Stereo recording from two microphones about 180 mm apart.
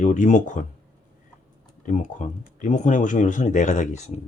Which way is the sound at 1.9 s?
45° left (ahead or behind).